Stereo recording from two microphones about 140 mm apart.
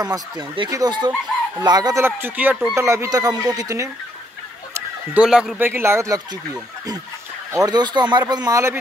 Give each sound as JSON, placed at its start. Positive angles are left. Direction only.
{"t": 0.0, "sound": "speech", "side_deg": -30}
{"t": 2.7, "sound": "speech", "side_deg": -20}
{"t": 5.1, "sound": "speech", "side_deg": -5}
{"t": 5.7, "sound": "speech", "side_deg": -20}